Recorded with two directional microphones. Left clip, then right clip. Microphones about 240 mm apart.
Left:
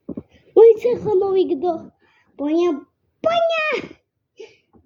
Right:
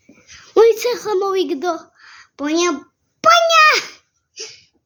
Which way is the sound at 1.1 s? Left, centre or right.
Right.